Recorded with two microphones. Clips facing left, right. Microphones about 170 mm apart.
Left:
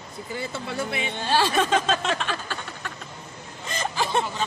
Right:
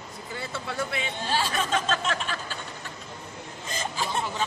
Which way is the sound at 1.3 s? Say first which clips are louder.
Left 6 dB; 75° left (ahead or behind).